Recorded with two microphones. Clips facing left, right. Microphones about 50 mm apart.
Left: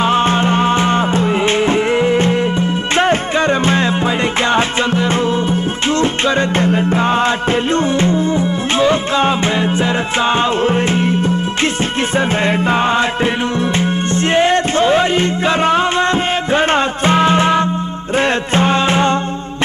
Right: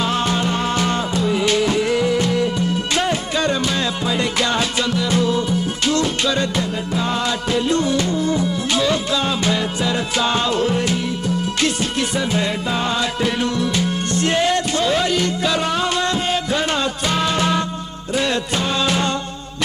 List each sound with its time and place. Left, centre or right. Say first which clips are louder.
0.0 s music: left 6 dB; left